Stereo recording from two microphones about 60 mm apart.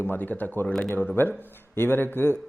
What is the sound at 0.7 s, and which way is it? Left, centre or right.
Speech, centre.